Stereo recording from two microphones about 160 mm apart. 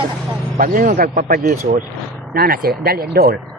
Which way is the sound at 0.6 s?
60° right (ahead or behind).